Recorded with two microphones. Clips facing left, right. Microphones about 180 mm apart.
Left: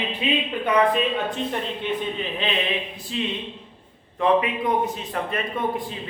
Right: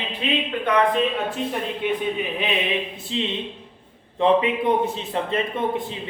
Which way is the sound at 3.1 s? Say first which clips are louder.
Right 1 dB; 25° right (ahead or behind).